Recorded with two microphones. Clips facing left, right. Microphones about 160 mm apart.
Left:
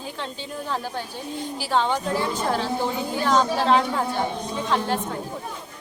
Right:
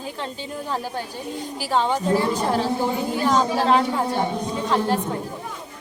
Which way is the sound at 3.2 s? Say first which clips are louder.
Even; 5° right (ahead or behind).